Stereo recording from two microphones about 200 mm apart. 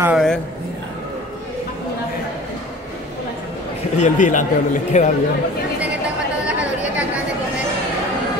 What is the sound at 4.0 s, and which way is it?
A man's voice, 40° left (ahead or behind).